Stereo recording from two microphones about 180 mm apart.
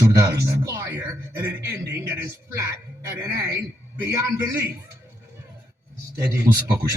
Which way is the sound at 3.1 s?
15° right (ahead or behind).